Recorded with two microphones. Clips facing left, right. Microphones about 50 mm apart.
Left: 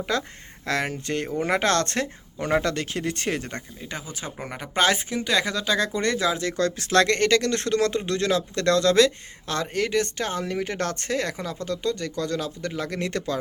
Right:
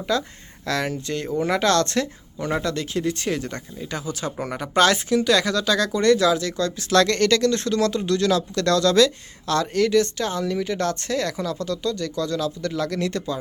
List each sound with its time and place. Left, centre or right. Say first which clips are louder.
0.1 s speech: right 5 dB; left
3.8 s speech: right 6 dB; centre
4.4 s speech: right 4 dB; centre; by 6.5 s left
6.6 s speech: left 2 dB; left
13.1 s speech: right 1 dB; left